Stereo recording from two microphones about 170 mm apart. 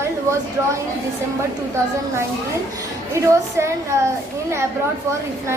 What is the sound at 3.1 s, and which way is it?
Speech, 15° right (ahead or behind).